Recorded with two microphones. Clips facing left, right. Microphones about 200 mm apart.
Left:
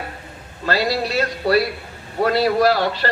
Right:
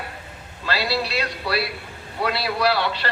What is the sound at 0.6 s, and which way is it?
A man's voice, 45° left (ahead or behind).